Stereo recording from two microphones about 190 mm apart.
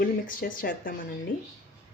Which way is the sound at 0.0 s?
45° left (ahead or behind).